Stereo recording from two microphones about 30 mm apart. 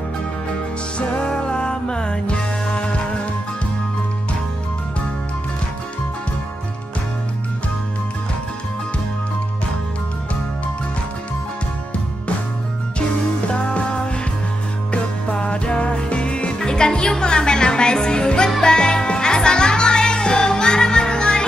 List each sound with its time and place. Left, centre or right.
0.9 s music: left
13.7 s music: left